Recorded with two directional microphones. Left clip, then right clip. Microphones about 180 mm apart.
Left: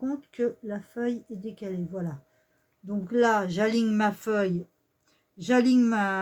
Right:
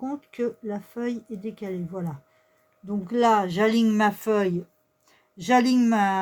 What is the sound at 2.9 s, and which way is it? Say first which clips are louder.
Speech: right 3 dB; 50° right (ahead or behind).